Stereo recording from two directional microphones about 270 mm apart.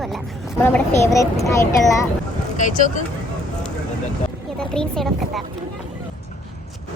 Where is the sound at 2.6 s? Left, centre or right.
Left.